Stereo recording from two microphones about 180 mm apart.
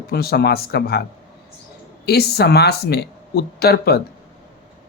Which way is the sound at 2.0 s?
65° left (ahead or behind).